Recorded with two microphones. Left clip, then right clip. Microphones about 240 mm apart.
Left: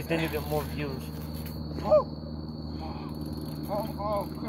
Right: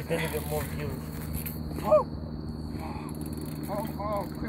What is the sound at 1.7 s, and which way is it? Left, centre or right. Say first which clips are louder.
Speech: even; centre.